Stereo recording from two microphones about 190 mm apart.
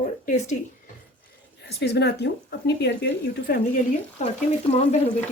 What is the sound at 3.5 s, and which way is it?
Speech, 45° left (ahead or behind).